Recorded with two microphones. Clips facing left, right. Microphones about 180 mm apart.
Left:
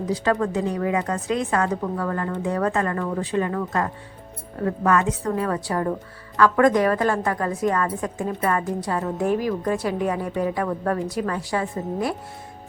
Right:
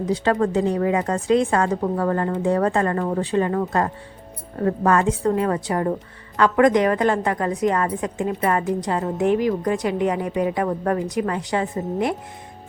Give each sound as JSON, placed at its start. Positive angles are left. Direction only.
{"t": 0.1, "sound": "a woman's voice", "side_deg": -35}